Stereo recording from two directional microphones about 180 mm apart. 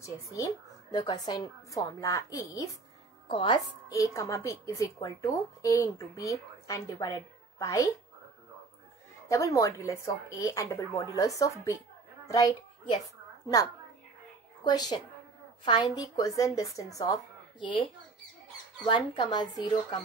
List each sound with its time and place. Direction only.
0.0 s a child's voice: 15° left (ahead or behind)
9.3 s a woman's voice: 15° left (ahead or behind)
14.6 s a woman's voice: 20° left (ahead or behind)
18.9 s a woman's voice: 25° left (ahead or behind)